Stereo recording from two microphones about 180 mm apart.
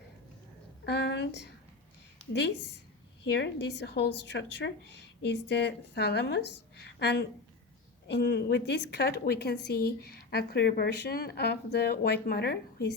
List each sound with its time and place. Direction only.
0.9 s a woman's voice: 65° left (ahead or behind)
3.2 s a woman's voice: 65° left (ahead or behind)